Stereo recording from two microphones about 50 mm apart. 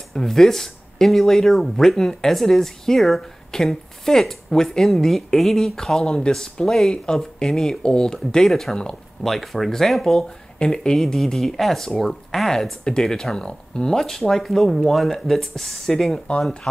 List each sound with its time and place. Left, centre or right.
0.1 s speech: centre
6.0 s speech: centre
8.7 s speech: centre
9.3 s speech: centre
10.6 s speech: centre